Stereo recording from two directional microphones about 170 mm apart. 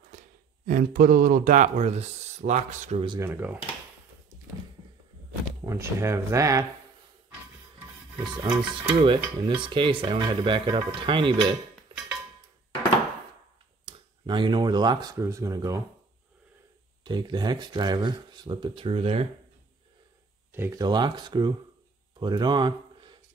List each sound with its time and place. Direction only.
0.7 s speech: 55° right (ahead or behind); by 3.2 s 35° right (ahead or behind)
3.2 s speech: 10° right (ahead or behind)
5.7 s speech: 15° right (ahead or behind)
8.2 s speech: 25° right (ahead or behind)
11.9 s music: 30° right (ahead or behind)
13.8 s speech: 30° right (ahead or behind)
17.0 s speech: 25° right (ahead or behind)
20.5 s speech: 15° right (ahead or behind)